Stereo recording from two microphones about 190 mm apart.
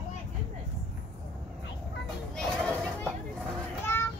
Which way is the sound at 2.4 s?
5° left (ahead or behind).